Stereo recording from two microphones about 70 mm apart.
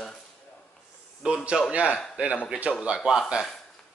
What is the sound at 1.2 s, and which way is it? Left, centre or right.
A man's voice, centre.